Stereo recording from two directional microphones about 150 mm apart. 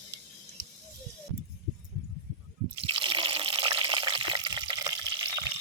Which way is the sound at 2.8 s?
35° right (ahead or behind).